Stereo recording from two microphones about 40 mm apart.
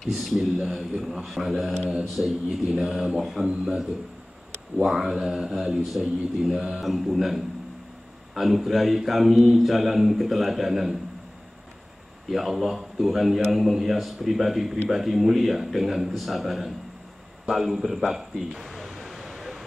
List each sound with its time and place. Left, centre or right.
0.2 s speech: centre
0.6 s speech: centre
2.2 s speech: centre
4.8 s speech: centre
6.8 s speech: centre
12.3 s speech: centre
17.5 s a sound: centre